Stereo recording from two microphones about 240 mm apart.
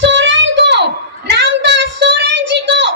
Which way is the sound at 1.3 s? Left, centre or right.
Right.